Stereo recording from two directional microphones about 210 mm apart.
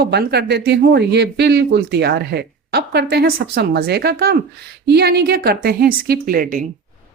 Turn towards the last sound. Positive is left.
turn(degrees=-40)  # may be behind; listen again after turning